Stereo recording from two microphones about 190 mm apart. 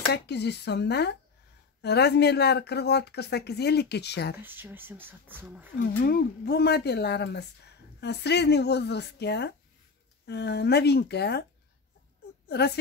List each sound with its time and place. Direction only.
0.1 s speech: 60° left (ahead or behind)
4.4 s speech: 10° right (ahead or behind)
5.8 s speech: 55° left (ahead or behind)
12.4 s speech: 60° left (ahead or behind)